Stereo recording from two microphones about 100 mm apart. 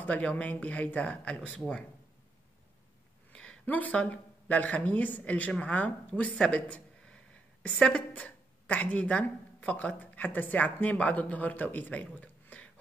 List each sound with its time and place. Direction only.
0.0 s speech: 15° left (ahead or behind)
3.3 s a woman's voice: 15° left (ahead or behind)